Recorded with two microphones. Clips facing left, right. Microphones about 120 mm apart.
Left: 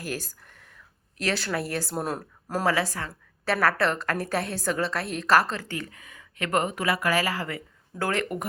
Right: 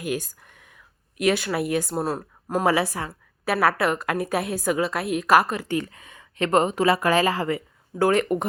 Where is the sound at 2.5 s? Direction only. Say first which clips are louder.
Right 4 dB; 20° right (ahead or behind).